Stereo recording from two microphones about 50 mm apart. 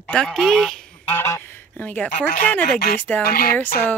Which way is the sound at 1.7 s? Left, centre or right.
Left.